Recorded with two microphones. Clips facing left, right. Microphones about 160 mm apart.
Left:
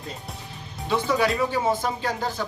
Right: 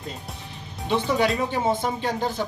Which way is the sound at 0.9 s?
20° right (ahead or behind).